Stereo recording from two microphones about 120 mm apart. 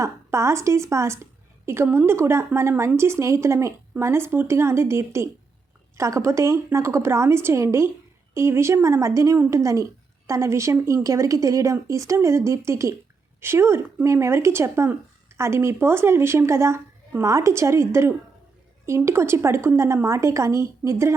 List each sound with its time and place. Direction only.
0.0 s a woman's voice: 25° right (ahead or behind)